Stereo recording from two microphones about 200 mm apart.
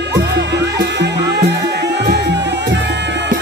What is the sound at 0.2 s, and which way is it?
Music, 60° right (ahead or behind).